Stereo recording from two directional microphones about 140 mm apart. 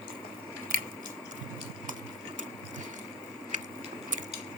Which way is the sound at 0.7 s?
80° right.